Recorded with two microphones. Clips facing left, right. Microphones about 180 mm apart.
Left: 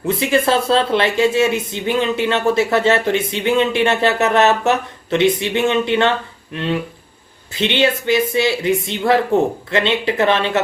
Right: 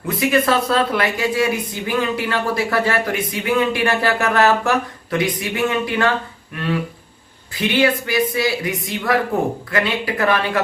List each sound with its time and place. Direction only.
0.0 s speech: 25° left (ahead or behind)